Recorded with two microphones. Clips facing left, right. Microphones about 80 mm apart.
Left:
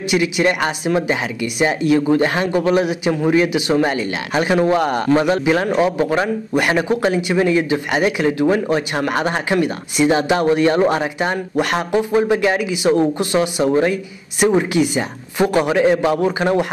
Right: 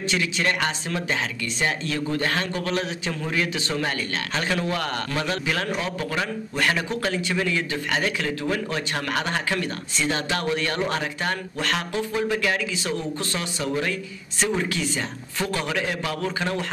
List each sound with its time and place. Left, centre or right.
0.1 s a man's voice: centre
3.2 s a man's voice: left
13.7 s speech: left
14.5 s a man's voice: centre